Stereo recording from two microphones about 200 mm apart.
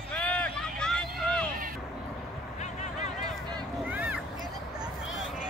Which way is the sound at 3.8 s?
10° right (ahead or behind).